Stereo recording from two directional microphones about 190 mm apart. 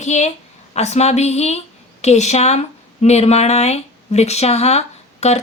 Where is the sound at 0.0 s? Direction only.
35° left (ahead or behind).